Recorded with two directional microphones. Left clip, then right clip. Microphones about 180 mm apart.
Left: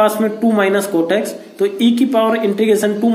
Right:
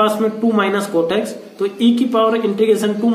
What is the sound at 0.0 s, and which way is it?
Speech, 20° left (ahead or behind).